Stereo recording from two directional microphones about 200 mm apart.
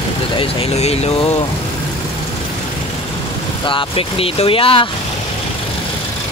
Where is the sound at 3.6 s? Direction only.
25° left (ahead or behind).